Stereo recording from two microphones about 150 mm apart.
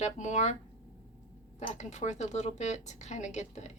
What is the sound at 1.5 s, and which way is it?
A woman's voice, 50° left (ahead or behind).